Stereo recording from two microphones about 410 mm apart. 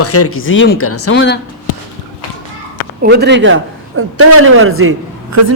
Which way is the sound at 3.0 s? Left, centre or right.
Right.